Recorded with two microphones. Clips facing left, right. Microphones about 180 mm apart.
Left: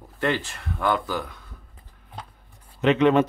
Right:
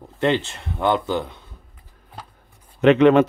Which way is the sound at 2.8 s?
65° right (ahead or behind).